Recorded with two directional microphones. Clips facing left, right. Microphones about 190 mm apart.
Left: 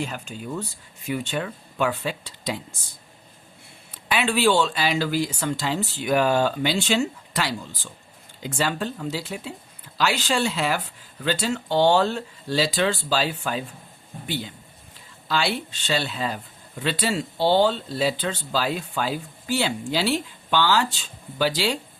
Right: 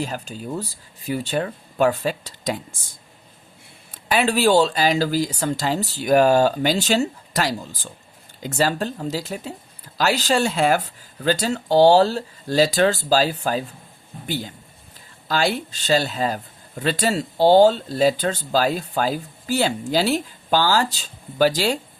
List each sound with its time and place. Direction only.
0.0 s speech: 35° right (ahead or behind)
4.1 s speech: 40° right (ahead or behind)